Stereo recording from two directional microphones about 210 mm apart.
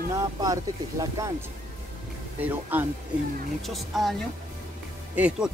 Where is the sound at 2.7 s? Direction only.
10° right (ahead or behind).